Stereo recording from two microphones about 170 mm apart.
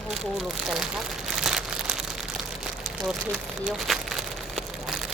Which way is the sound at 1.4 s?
Centre (ahead or behind).